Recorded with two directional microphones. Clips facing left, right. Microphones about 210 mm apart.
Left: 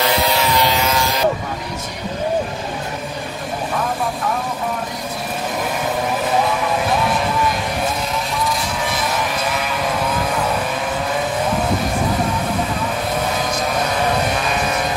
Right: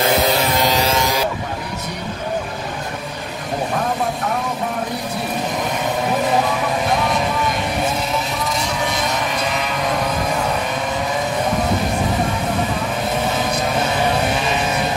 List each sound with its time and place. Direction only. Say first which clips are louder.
0.0 s vehicle: right 1 dB; 50° right (ahead or behind)
0.8 s vehicle: right 1 dB; 20° right (ahead or behind)